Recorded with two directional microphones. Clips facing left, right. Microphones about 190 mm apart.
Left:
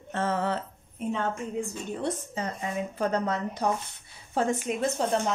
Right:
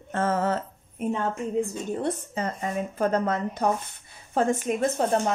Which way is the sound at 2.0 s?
55° right (ahead or behind).